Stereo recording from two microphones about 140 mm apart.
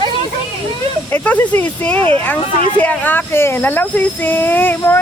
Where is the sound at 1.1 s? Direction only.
10° left (ahead or behind).